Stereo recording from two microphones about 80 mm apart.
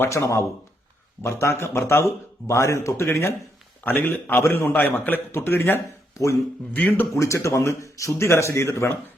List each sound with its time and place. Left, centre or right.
0.1 s a man's voice: left